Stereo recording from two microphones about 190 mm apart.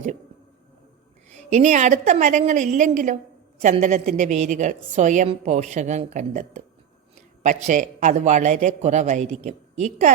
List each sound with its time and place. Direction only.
1.5 s a woman's voice: 40° right (ahead or behind)